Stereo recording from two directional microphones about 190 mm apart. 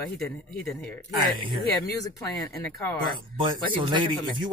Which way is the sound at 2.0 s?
15° left (ahead or behind).